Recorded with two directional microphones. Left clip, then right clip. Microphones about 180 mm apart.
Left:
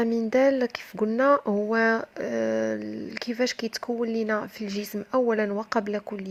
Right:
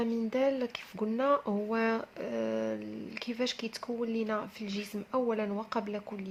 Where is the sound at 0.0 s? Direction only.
35° left (ahead or behind).